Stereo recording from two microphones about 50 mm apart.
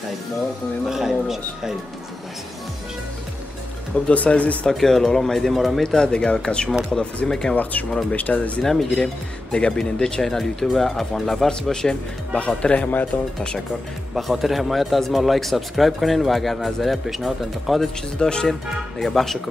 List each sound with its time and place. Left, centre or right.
0.8 s speech: centre
3.9 s speech: left
4.6 s speech: centre
5.9 s speech: centre
8.1 s speech: left
8.6 s speech: centre
12.4 s speech: left
14.1 s a man's voice: centre
18.2 s speech: centre